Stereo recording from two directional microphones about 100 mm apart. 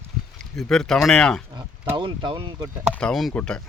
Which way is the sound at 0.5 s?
5° left (ahead or behind).